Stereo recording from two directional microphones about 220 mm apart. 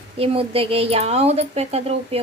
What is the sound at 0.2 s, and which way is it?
A woman's voice, 25° right (ahead or behind).